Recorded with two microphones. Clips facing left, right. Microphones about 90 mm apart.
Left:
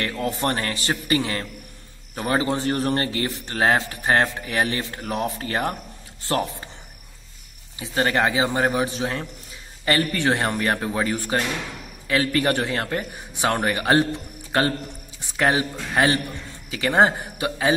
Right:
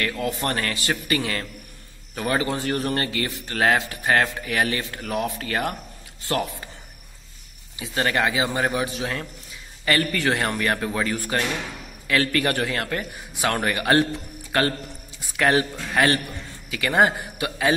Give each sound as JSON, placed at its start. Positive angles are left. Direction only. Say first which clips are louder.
{"t": 0.0, "sound": "speech", "louder": "left 1 dB", "side_deg": 30}
{"t": 7.8, "sound": "a man's voice", "louder": "left 2 dB", "side_deg": 30}